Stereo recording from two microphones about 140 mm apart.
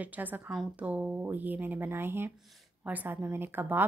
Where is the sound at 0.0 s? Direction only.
10° right (ahead or behind).